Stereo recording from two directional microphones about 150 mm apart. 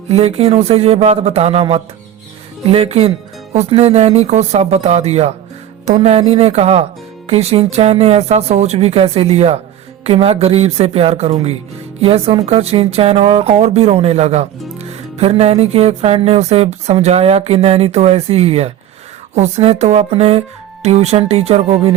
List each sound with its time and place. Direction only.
0.1 s speech: 45° right (ahead or behind)